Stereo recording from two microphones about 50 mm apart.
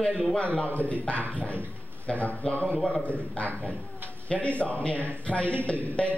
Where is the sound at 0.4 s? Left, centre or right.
Left.